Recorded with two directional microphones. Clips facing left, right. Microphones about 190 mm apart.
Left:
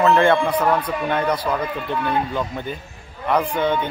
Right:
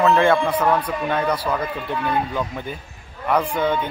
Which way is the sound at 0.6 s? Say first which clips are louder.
Even; 10° left (ahead or behind).